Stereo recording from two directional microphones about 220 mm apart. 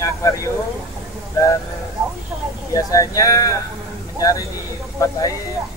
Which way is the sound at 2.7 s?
15° left (ahead or behind).